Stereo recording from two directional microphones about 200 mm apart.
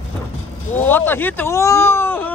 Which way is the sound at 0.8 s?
10° left (ahead or behind).